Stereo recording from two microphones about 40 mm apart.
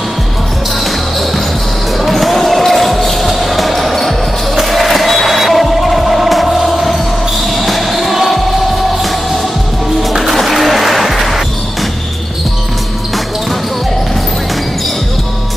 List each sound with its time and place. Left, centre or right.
2.0 s basketball bounce: centre
4.6 s music: centre
10.0 s music: centre